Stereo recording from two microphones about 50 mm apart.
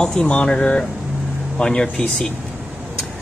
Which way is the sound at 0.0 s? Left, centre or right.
Centre.